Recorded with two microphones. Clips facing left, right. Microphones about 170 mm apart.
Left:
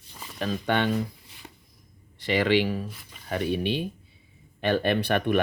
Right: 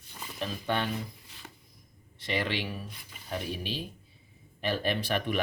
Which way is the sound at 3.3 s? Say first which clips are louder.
Left 9 dB; 65° left (ahead or behind).